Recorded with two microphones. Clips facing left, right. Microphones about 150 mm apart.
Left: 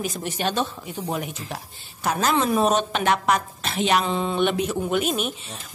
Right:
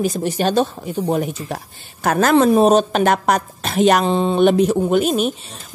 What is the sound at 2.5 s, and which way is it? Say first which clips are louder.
A woman's voice: right 8 dB; 35° right (ahead or behind).